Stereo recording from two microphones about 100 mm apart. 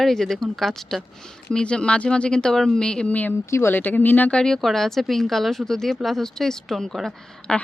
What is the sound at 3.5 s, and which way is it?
Speech, 25° left (ahead or behind).